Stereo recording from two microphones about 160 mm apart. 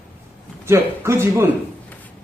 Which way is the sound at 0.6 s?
15° right (ahead or behind).